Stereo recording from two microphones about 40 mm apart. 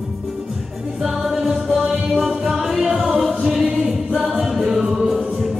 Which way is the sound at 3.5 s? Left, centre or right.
Centre.